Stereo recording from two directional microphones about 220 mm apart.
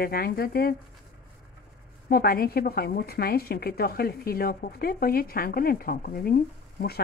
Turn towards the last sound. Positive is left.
turn(degrees=45)  # may be behind; listen again after turning